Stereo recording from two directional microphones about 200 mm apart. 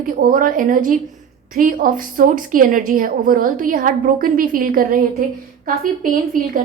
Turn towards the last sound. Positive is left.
turn(degrees=-45)  # may be behind; listen again after turning